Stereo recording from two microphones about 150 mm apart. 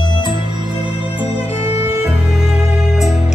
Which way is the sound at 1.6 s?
45° left (ahead or behind).